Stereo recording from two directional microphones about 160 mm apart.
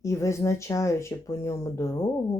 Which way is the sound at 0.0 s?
20° left (ahead or behind).